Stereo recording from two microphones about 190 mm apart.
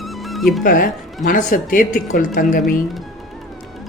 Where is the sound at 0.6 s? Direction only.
45° left (ahead or behind).